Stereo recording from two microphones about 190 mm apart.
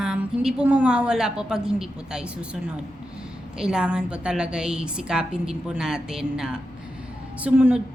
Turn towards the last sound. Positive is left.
turn(degrees=-5)  # may be behind; listen again after turning